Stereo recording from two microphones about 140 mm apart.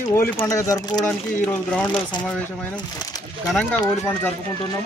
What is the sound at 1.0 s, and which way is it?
Speech, 10° left (ahead or behind).